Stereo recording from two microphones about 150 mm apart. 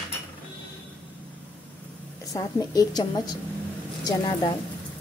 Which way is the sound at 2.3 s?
25° left (ahead or behind).